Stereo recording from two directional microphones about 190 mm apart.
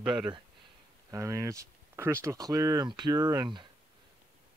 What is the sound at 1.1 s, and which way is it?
Speech, 15° right (ahead or behind).